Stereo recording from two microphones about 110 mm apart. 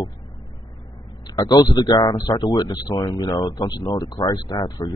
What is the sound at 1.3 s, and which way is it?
Speech, 35° left (ahead or behind).